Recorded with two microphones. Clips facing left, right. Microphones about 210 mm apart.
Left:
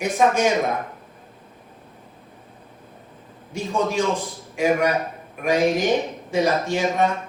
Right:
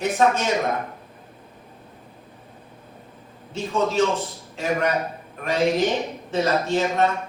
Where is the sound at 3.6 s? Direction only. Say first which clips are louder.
Right 1 dB; 15° left (ahead or behind).